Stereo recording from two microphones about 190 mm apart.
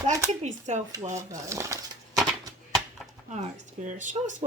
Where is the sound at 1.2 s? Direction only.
15° right (ahead or behind).